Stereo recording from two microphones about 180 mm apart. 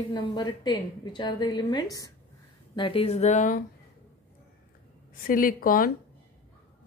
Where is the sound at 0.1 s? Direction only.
25° left (ahead or behind); by 3.6 s 45° left (ahead or behind).